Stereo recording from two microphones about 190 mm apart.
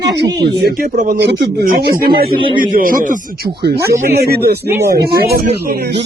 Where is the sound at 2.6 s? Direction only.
45° right (ahead or behind).